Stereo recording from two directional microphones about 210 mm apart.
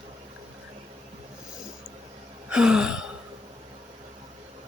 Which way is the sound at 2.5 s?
5° right (ahead or behind).